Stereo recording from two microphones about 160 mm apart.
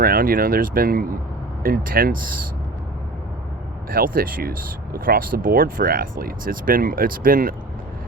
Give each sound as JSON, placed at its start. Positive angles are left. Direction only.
{"t": 0.0, "sound": "speech", "side_deg": -65}
{"t": 3.8, "sound": "speech", "side_deg": -65}